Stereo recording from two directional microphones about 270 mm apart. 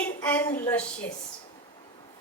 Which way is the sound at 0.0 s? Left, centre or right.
Centre.